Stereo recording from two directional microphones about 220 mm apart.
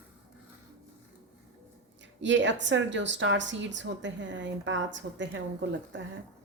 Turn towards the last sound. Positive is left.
turn(degrees=-55)  # may be behind; listen again after turning